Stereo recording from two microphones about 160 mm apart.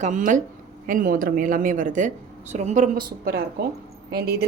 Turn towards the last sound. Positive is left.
turn(degrees=-75)  # may be behind; listen again after turning